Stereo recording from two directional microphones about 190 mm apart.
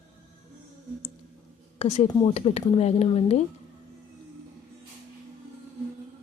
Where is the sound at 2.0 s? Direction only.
30° left (ahead or behind).